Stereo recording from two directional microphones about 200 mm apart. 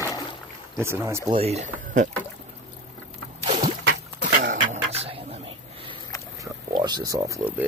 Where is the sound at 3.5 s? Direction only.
35° right (ahead or behind).